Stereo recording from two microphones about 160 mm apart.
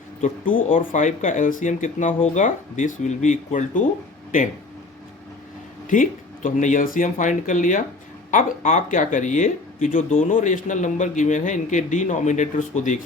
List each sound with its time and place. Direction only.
0.2 s speech: 55° left (ahead or behind)
5.9 s speech: 55° left (ahead or behind)